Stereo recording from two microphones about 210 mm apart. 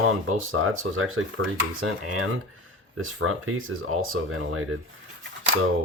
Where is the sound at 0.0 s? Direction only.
90° right.